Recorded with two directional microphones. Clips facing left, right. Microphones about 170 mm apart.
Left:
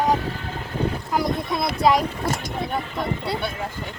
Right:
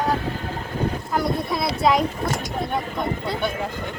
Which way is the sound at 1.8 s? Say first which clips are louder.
Left 1 dB; centre (ahead or behind).